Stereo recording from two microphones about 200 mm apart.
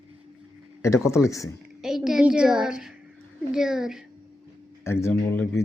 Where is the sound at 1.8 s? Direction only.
Centre (ahead or behind).